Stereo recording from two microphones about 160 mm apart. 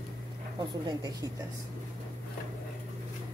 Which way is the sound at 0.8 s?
25° right (ahead or behind).